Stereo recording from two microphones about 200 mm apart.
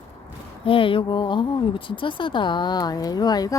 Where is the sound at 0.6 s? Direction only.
25° left (ahead or behind).